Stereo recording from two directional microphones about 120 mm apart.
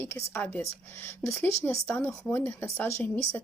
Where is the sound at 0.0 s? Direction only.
20° left (ahead or behind).